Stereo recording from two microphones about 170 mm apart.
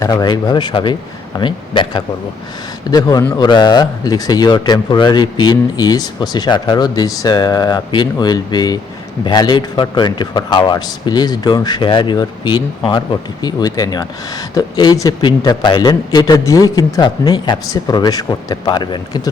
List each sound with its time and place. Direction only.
0.0 s speech: 20° left (ahead or behind)